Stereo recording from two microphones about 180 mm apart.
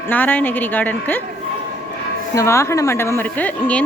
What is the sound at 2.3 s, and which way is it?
A woman's voice, 15° left (ahead or behind).